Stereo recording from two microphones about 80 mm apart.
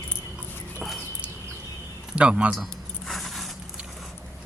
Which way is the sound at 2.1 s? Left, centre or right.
Centre.